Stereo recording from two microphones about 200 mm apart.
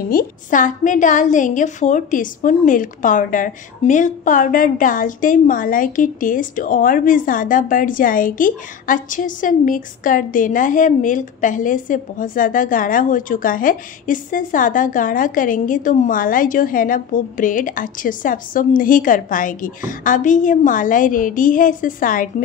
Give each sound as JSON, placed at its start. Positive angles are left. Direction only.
{"t": 0.1, "sound": "a woman's voice", "side_deg": 45}